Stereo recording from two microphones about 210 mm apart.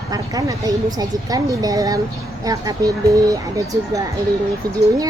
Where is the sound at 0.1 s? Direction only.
15° right (ahead or behind).